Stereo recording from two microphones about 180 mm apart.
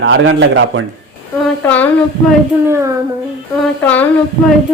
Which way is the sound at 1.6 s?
10° left (ahead or behind).